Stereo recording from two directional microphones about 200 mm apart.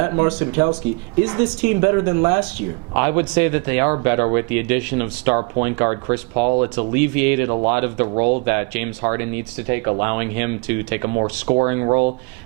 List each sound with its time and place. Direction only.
0.0 s speech: 20° right (ahead or behind)
8.0 s speech: 30° right (ahead or behind)
8.4 s speech: 10° right (ahead or behind)
11.1 s speech: 25° right (ahead or behind)